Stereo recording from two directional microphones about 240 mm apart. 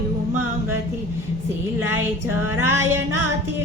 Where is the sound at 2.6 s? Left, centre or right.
Centre.